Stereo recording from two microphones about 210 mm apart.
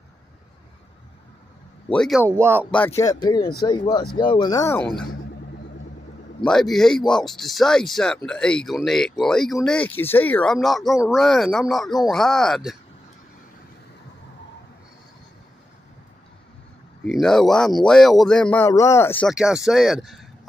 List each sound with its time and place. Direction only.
2.0 s speech: centre (ahead or behind)
2.2 s speech: 10° right (ahead or behind)
3.0 s speech: 20° left (ahead or behind)
6.4 s speech: centre (ahead or behind)
17.0 s speech: centre (ahead or behind)
19.3 s speech: 5° right (ahead or behind)